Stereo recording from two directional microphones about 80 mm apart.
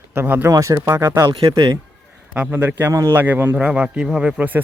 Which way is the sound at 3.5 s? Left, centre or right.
Centre.